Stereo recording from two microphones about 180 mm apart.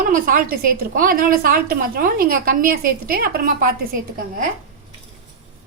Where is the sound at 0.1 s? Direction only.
50° right (ahead or behind).